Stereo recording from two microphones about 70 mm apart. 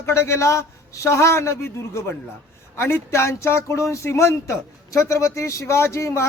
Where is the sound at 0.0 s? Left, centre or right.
Left.